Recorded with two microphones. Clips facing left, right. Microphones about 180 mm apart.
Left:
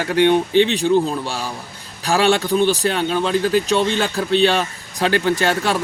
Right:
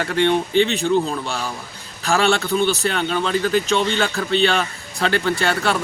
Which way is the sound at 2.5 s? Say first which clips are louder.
Left 3 dB; 40° left (ahead or behind).